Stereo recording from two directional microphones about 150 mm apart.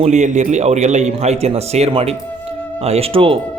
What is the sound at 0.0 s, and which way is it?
A man's voice, 50° right (ahead or behind).